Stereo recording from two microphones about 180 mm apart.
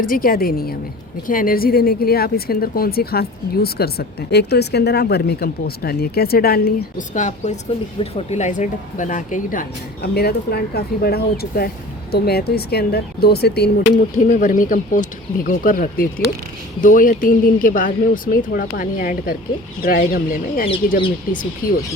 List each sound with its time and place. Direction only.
0.0 s speech: 55° left (ahead or behind)
14.3 s speech: 45° left (ahead or behind)